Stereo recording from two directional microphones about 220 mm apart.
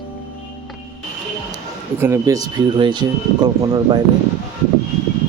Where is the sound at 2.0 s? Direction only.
10° right (ahead or behind).